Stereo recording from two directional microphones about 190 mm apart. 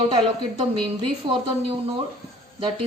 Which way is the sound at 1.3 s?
25° right (ahead or behind).